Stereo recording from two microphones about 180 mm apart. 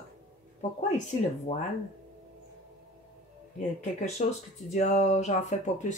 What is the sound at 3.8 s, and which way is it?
Speech, 40° left (ahead or behind).